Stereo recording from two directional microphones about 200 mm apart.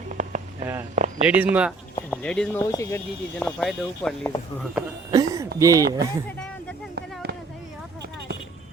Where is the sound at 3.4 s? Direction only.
5° left (ahead or behind).